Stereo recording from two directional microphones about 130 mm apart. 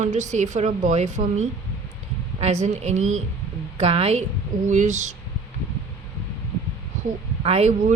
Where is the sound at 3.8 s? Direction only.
50° right (ahead or behind).